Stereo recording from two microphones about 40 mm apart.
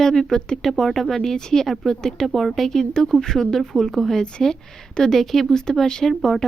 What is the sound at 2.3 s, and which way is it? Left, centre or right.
Speech, centre.